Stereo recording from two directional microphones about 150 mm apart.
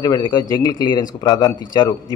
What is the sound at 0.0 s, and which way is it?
A man's voice, 25° left (ahead or behind).